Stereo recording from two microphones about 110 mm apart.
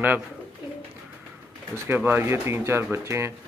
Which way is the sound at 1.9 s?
15° right (ahead or behind).